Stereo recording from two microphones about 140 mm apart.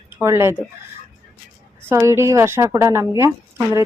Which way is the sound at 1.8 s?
20° right (ahead or behind).